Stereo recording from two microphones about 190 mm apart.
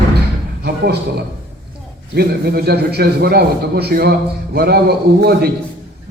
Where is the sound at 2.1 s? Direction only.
55° right (ahead or behind).